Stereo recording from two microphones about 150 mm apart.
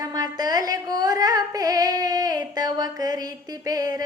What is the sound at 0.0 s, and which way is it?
Singing, 25° right (ahead or behind).